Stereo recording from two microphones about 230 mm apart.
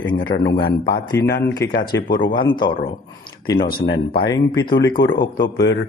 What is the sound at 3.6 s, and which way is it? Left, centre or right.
Speech, left.